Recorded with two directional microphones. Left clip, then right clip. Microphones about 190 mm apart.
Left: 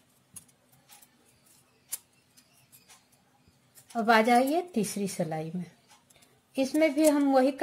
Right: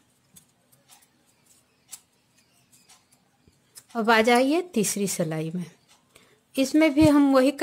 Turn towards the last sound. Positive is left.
turn(degrees=-35)  # may be behind; listen again after turning